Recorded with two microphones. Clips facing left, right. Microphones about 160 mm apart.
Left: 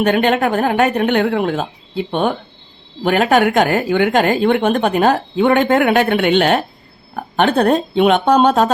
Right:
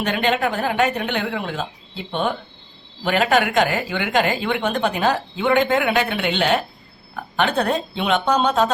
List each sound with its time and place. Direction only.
0.0 s a woman's voice: 50° left (ahead or behind)